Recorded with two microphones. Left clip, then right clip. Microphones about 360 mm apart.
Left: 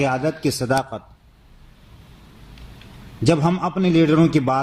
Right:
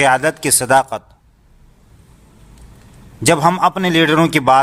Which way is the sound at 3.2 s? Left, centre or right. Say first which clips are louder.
Right 7 dB; right.